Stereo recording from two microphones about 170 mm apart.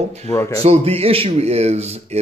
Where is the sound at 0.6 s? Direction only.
35° right (ahead or behind).